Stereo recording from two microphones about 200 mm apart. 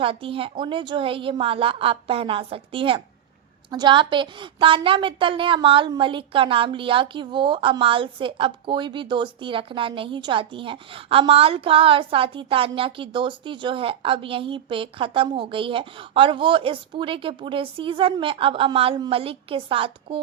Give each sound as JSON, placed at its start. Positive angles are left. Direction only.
{"t": 0.0, "sound": "a woman's voice", "side_deg": -25}